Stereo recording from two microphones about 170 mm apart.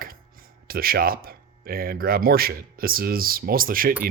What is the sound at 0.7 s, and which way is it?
Speech, 60° right (ahead or behind).